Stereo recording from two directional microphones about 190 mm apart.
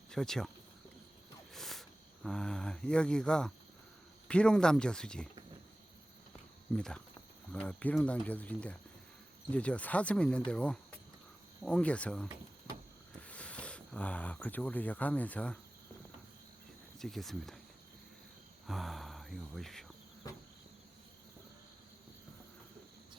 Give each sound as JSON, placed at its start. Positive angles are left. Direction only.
{"t": 0.1, "sound": "speech", "side_deg": 5}
{"t": 1.5, "sound": "a sound", "side_deg": 0}
{"t": 2.2, "sound": "speech", "side_deg": 5}
{"t": 6.7, "sound": "speech", "side_deg": 5}
{"t": 17.0, "sound": "speech", "side_deg": 0}
{"t": 18.7, "sound": "a sound", "side_deg": 0}
{"t": 20.2, "sound": "insect", "side_deg": 20}